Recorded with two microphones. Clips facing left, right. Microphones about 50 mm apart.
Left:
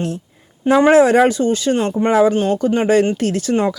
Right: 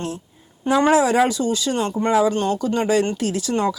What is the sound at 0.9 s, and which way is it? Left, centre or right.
A woman's voice, left.